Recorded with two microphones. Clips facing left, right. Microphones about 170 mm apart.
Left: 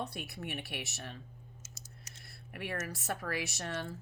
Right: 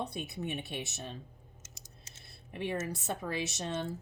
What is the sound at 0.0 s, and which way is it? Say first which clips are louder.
A woman's voice: right 3 dB; 20° right (ahead or behind).